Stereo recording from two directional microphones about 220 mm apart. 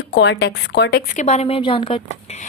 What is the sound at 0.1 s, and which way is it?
Speech, 55° left (ahead or behind).